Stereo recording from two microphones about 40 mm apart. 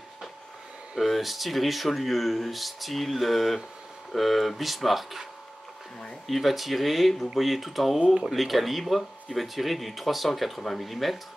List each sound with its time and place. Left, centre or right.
0.9 s speech: centre
6.2 s speech: centre
8.0 s speech: centre
8.3 s speech: centre